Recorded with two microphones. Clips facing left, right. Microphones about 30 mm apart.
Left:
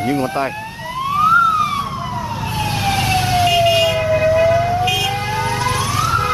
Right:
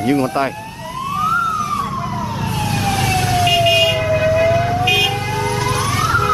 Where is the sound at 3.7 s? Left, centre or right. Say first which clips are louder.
Even; centre.